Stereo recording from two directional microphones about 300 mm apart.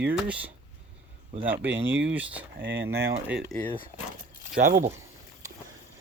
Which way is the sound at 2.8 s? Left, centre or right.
Centre.